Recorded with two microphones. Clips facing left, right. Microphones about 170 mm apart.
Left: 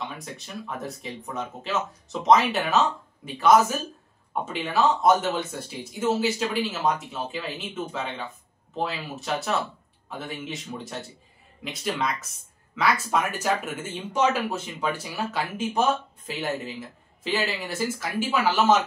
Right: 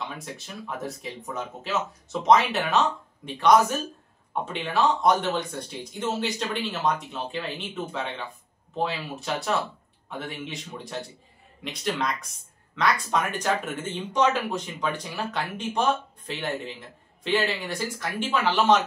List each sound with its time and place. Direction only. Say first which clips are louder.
0.2 s speech: left 1 dB; centre (ahead or behind)